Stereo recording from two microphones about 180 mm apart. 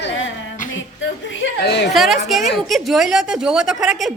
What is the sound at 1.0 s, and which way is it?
Chuckle, 90° left.